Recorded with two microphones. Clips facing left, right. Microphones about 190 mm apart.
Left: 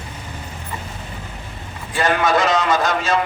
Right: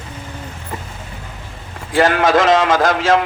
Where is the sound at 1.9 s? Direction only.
90° right.